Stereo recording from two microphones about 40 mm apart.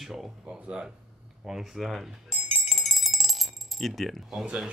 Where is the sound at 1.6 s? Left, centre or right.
Centre.